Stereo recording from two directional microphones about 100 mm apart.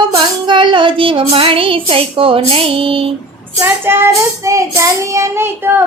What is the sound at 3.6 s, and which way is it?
Child singing, 25° right (ahead or behind).